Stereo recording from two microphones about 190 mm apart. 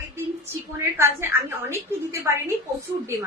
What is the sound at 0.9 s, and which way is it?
A woman's voice, 15° right (ahead or behind).